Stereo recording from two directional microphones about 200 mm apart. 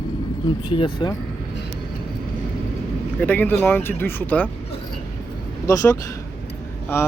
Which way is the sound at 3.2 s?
10° left (ahead or behind).